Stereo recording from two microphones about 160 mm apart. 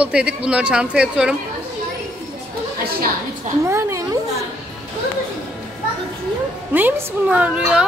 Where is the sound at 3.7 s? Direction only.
20° right (ahead or behind).